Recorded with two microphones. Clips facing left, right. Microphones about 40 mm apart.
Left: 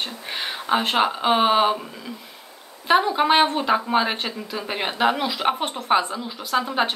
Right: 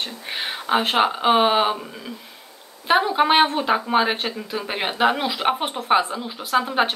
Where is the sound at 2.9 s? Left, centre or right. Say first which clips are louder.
Even; centre.